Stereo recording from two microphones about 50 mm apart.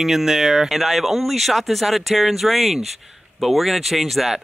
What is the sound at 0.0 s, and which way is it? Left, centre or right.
Speech, centre.